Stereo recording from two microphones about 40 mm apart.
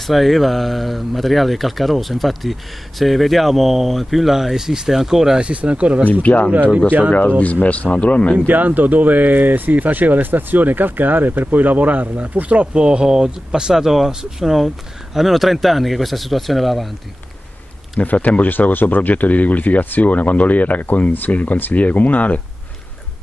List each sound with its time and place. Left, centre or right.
0.0 s speech: centre
5.4 s speech: right
6.2 s speech: left
8.5 s speech: right
12.7 s speech: right
13.0 s speech: centre
18.0 s speech: left
18.5 s speech: left